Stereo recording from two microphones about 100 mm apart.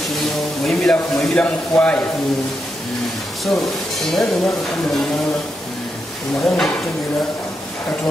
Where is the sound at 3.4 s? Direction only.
Centre (ahead or behind).